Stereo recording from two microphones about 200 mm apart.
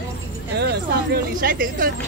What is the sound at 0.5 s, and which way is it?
Speech, 50° right (ahead or behind).